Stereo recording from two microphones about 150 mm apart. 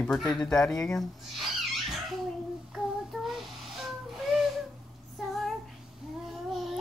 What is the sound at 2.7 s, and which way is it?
Child singing, centre (ahead or behind).